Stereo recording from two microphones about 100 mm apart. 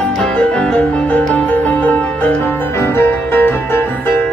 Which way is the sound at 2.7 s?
25° left (ahead or behind).